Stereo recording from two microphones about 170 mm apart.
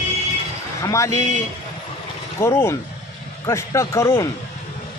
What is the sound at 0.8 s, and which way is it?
Speech, 20° left (ahead or behind).